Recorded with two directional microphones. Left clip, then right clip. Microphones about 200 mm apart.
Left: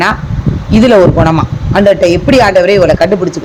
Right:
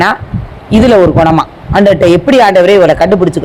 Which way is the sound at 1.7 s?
15° right (ahead or behind).